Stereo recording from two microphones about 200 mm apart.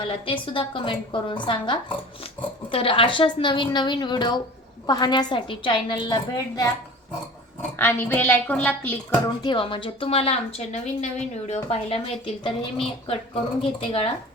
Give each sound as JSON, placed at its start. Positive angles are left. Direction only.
{"t": 0.0, "sound": "a woman's voice", "side_deg": 25}
{"t": 7.8, "sound": "a woman's voice", "side_deg": 10}
{"t": 9.4, "sound": "a woman's voice", "side_deg": 25}